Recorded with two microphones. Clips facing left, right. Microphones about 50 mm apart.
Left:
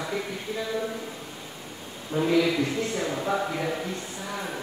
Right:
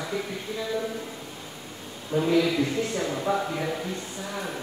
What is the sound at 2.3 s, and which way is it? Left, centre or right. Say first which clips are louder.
A man's voice: even; centre.